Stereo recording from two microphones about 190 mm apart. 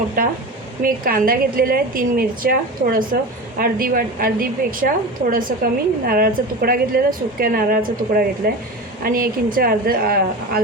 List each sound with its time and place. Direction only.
0.2 s speech: 45° right (ahead or behind)